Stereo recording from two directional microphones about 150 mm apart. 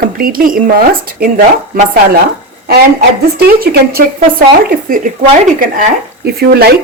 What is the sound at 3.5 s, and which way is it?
A woman's voice, 80° right.